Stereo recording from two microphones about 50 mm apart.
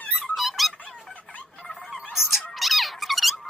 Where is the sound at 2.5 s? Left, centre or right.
Centre.